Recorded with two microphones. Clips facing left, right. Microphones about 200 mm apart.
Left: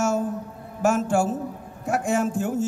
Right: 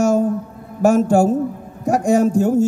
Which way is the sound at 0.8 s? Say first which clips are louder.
Right 8 dB; 40° right (ahead or behind).